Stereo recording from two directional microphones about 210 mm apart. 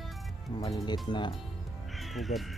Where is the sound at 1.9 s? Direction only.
Centre (ahead or behind).